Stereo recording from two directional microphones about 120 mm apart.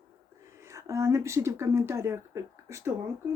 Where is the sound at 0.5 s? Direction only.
25° right (ahead or behind).